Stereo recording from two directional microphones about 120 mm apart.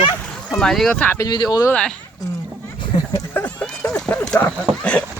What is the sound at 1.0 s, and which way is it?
Speech, 20° left (ahead or behind).